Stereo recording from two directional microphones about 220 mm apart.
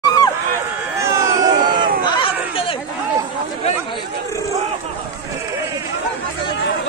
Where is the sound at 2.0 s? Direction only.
20° left (ahead or behind).